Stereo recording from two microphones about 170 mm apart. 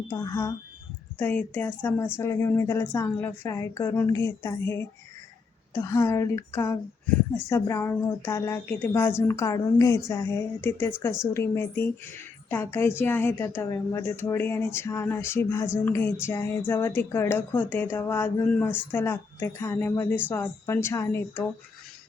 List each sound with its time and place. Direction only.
0.1 s speech: 20° left (ahead or behind)